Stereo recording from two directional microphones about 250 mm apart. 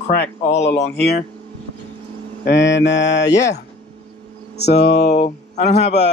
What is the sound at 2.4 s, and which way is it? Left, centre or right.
Speech, left.